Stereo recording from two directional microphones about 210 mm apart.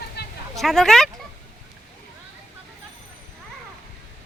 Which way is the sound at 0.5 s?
Centre (ahead or behind).